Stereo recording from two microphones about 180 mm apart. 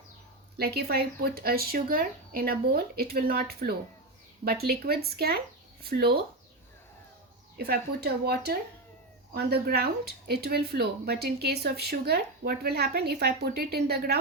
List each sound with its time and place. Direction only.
0.5 s speech: 60° right (ahead or behind)
7.5 s speech: 60° right (ahead or behind)